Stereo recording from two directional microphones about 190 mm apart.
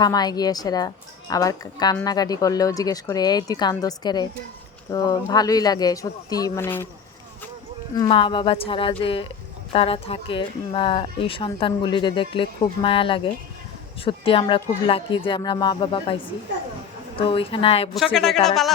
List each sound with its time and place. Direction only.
0.0 s speech: 20° left (ahead or behind)
7.9 s speech: 20° left (ahead or behind)
17.2 s speech: 30° left (ahead or behind)
17.9 s speech: centre (ahead or behind)